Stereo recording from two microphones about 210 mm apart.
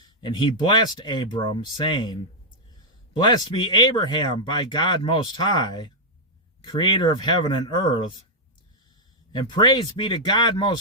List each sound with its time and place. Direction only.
0.2 s speech: 20° left (ahead or behind)
3.2 s speech: 20° left (ahead or behind)
9.3 s speech: 20° left (ahead or behind)